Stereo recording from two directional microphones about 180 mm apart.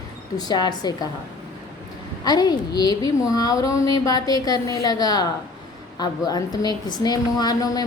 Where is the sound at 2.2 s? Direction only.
20° left (ahead or behind).